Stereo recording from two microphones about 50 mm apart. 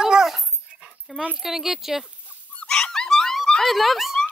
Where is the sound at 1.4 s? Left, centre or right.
Centre.